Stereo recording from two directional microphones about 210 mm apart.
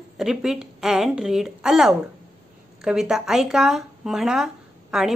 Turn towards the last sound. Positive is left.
turn(degrees=0)  # may be behind; listen again after turning